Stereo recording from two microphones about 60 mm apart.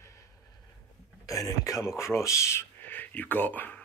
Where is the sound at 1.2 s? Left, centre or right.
Left.